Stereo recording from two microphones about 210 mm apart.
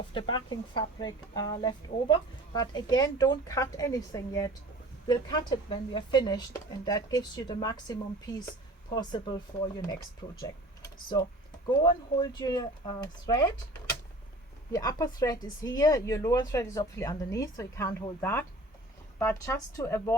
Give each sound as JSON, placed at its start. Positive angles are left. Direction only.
{"t": 0.1, "sound": "speech", "side_deg": 25}
{"t": 11.8, "sound": "speech", "side_deg": 20}
{"t": 14.7, "sound": "speech", "side_deg": 15}